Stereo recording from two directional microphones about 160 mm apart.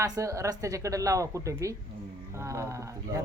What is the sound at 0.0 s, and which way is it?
Speech, 20° right (ahead or behind).